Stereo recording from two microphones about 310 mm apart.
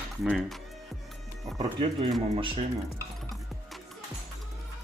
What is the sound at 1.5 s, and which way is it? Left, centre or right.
Speech, centre.